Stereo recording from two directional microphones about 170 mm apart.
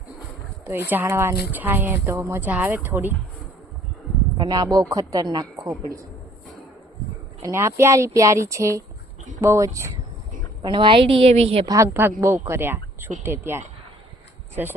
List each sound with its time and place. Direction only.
0.6 s speech: 15° right (ahead or behind)
4.4 s a woman's voice: 25° right (ahead or behind)
7.4 s speech: 15° right (ahead or behind)
10.6 s a woman's voice: 30° right (ahead or behind)
11.6 s speech: 20° right (ahead or behind)